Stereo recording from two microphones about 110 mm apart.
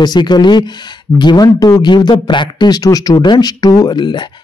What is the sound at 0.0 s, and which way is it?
Speech, 40° left (ahead or behind).